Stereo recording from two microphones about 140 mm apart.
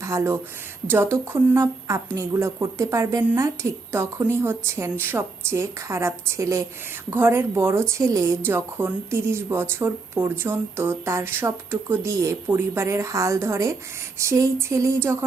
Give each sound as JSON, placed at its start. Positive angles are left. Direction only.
{"t": 0.0, "sound": "speech", "side_deg": -20}